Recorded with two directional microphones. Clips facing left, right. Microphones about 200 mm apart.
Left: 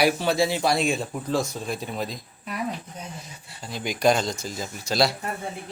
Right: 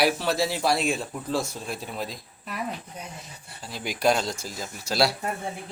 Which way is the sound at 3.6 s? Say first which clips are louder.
Left 2 dB; 5° right (ahead or behind).